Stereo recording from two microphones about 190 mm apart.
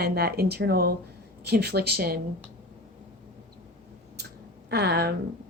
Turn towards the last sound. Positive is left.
turn(degrees=-60)  # may be behind; listen again after turning